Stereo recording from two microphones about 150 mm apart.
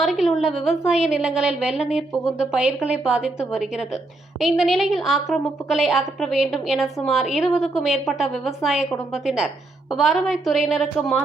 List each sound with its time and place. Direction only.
0.0 s a woman's voice: centre (ahead or behind)